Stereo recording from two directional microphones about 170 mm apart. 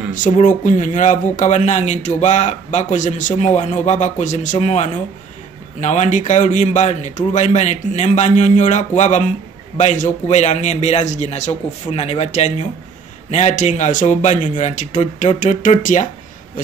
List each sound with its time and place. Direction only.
0.1 s a man's voice: 50° left (ahead or behind)